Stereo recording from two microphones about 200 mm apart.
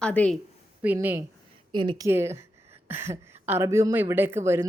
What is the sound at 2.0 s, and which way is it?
A woman's voice, 15° right (ahead or behind).